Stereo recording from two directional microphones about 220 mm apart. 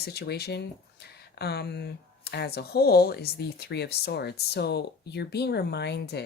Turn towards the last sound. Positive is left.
turn(degrees=50)  # may be behind; listen again after turning